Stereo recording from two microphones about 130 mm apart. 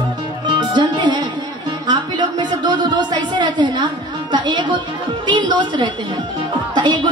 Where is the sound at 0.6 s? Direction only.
35° right (ahead or behind).